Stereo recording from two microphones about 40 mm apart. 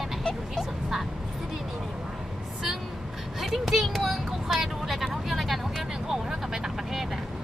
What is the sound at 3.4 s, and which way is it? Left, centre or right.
Speech, centre.